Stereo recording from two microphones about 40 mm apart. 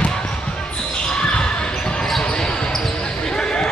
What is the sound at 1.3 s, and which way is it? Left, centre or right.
Basketball bounce, left.